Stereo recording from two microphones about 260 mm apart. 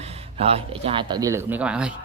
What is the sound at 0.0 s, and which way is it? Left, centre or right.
Speech, right.